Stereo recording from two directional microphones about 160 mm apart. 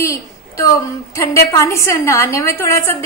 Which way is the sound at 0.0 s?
15° left (ahead or behind).